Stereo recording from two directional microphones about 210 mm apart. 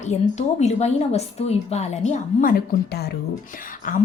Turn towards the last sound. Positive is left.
turn(degrees=40)  # may be behind; listen again after turning